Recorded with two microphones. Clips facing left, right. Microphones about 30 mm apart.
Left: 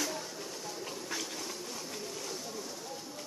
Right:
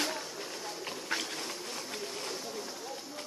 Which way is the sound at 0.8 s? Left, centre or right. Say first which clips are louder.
Right 4 dB; right.